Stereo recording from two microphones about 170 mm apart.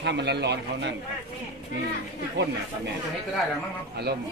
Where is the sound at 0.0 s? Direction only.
90° right.